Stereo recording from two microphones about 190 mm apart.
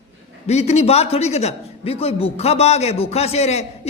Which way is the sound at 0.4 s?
35° left (ahead or behind).